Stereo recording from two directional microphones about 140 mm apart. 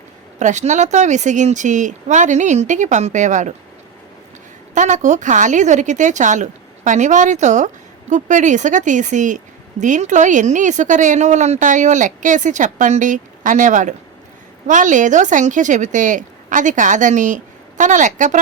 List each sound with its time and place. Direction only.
0.3 s speech: 60° right (ahead or behind)
4.7 s speech: 60° right (ahead or behind)